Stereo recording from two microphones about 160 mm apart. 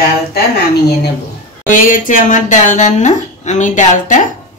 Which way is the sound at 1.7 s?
55° left (ahead or behind).